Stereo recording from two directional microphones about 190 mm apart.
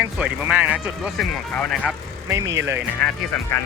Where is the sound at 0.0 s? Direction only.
5° right (ahead or behind).